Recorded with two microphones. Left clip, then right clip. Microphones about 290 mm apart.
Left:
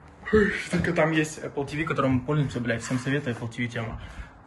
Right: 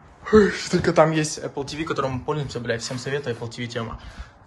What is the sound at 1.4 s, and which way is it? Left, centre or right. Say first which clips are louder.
Speech: right 1 dB; right.